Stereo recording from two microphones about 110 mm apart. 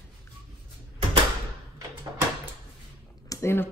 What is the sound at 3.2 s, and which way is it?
Speech, 20° left (ahead or behind).